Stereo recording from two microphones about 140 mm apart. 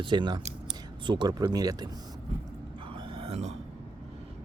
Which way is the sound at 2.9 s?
40° right (ahead or behind).